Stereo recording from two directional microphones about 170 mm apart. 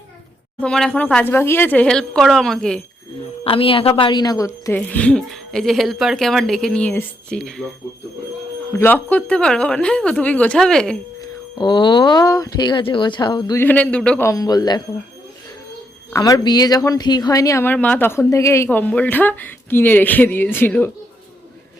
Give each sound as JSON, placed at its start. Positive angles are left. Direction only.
{"t": 0.6, "sound": "speech", "side_deg": 5}
{"t": 3.4, "sound": "speech", "side_deg": 30}
{"t": 8.8, "sound": "speech", "side_deg": 10}
{"t": 11.5, "sound": "speech", "side_deg": 25}
{"t": 13.6, "sound": "speech", "side_deg": 10}
{"t": 16.1, "sound": "speech", "side_deg": 20}